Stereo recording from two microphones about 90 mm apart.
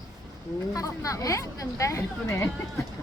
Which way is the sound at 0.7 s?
40° left (ahead or behind).